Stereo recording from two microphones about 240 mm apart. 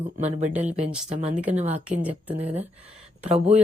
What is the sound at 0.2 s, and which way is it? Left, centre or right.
Speech, right.